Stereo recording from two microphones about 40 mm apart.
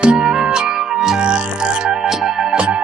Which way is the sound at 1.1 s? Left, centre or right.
Right.